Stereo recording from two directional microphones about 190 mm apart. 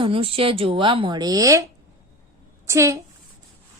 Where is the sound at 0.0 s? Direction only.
30° right (ahead or behind).